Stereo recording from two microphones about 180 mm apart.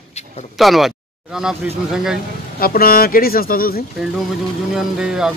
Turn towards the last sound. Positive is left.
turn(degrees=-5)  # may be behind; listen again after turning